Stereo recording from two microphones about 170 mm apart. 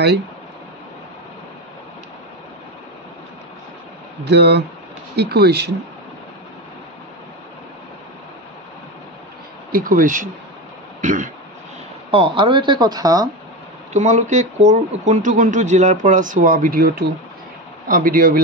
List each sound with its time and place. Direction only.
4.2 s speech: 80° right
9.7 s speech: 55° right (ahead or behind)
11.0 s throat clearing: 50° right (ahead or behind)
12.1 s speech: 30° right (ahead or behind)
13.9 s speech: 45° right (ahead or behind)